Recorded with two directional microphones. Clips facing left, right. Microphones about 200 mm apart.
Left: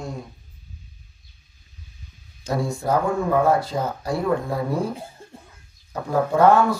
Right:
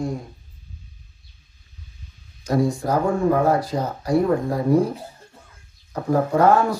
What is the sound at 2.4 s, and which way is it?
Speech, 25° left (ahead or behind).